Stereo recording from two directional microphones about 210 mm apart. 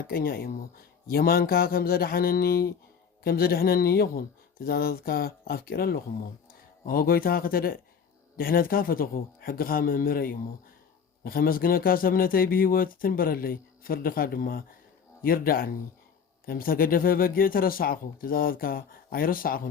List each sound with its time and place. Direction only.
0.1 s a man's voice: 45° left (ahead or behind)